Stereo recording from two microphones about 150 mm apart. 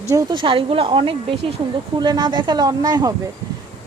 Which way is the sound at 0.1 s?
25° right (ahead or behind).